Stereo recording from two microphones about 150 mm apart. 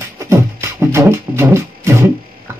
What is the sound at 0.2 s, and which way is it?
Music, 20° right (ahead or behind).